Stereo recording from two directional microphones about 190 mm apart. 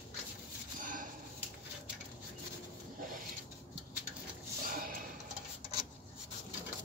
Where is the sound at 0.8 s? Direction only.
45° right (ahead or behind).